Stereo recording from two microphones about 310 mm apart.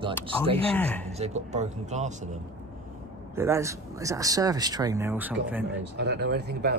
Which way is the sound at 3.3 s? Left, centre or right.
Centre.